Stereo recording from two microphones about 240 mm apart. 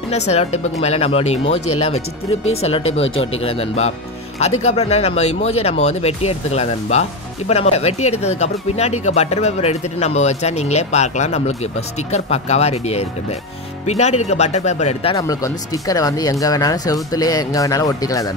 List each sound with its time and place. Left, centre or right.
0.3 s speech: left
2.9 s speech: left